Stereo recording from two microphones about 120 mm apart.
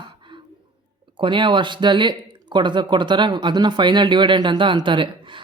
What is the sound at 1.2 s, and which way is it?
Speech, 45° right (ahead or behind).